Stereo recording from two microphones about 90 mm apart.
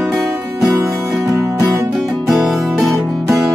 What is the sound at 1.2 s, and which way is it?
Music, 40° right (ahead or behind).